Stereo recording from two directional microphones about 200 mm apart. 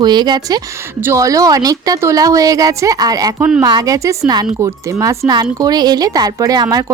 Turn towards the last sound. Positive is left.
turn(degrees=-20)  # may be behind; listen again after turning